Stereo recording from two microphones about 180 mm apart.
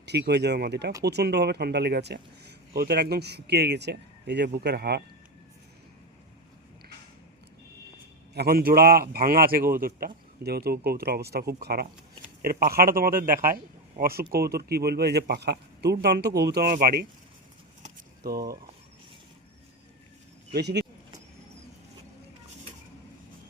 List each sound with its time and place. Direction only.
0.0 s speech: 70° right (ahead or behind)
8.4 s speech: 55° right (ahead or behind)
18.2 s speech: 60° right (ahead or behind)
20.5 s speech: 65° right (ahead or behind)